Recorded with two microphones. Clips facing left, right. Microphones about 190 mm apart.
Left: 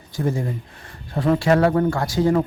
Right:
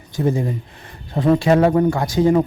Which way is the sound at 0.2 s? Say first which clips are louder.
Right 4 dB; 20° right (ahead or behind).